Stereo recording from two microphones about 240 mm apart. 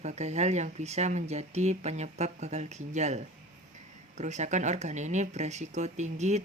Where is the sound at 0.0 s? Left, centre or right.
Right.